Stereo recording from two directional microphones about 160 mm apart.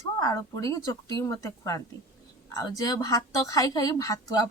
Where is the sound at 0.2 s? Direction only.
20° left (ahead or behind).